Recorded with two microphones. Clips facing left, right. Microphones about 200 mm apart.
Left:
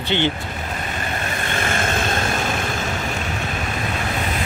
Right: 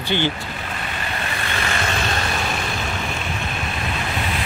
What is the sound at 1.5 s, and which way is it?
Vehicle, 50° left (ahead or behind).